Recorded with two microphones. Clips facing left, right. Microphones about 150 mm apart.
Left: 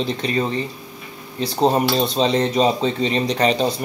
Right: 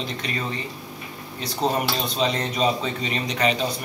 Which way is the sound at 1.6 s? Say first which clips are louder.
Left 7 dB; 30° left (ahead or behind).